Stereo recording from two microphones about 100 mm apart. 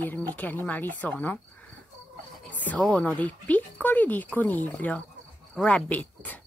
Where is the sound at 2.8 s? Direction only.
10° left (ahead or behind).